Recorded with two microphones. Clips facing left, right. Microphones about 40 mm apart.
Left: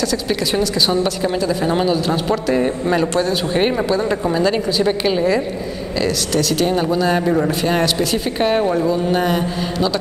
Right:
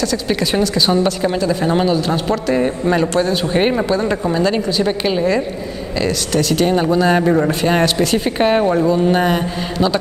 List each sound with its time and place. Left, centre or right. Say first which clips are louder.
0.0 s a woman's voice: right 1 dB; centre